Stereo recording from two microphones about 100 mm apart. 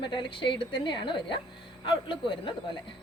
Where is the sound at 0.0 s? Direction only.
55° left (ahead or behind).